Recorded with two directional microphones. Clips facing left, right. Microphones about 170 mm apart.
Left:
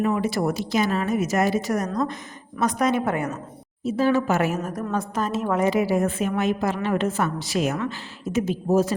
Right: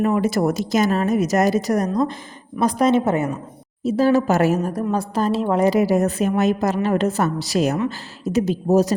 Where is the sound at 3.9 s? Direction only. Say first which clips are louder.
Right 4 dB; 40° right (ahead or behind).